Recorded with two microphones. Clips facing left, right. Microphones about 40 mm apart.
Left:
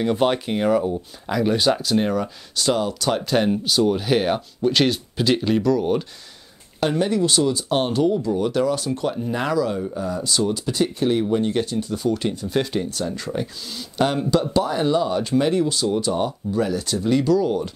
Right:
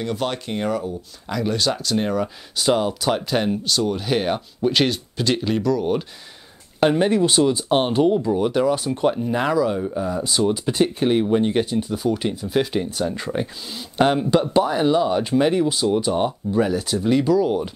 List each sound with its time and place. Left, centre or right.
0.0 s speech: centre
2.5 s speech: centre
3.2 s speech: centre
6.8 s speech: right
9.1 s speech: centre